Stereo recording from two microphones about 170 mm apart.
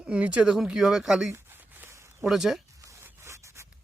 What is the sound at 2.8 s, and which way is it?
Zipper, 15° right (ahead or behind).